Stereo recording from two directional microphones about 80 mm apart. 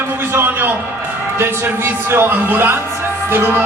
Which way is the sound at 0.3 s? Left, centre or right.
Right.